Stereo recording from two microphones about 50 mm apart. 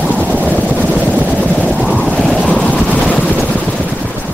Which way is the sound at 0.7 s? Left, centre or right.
Right.